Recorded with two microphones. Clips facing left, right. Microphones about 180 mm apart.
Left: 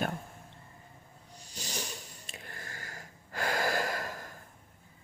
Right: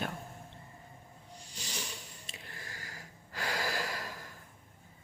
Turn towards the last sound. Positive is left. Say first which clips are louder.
# left 5 dB
turn(degrees=50)  # may be behind; listen again after turning